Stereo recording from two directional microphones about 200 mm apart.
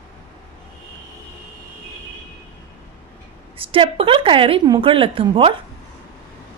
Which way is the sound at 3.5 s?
25° right (ahead or behind).